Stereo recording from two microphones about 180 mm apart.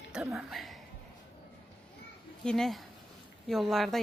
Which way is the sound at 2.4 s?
Centre (ahead or behind).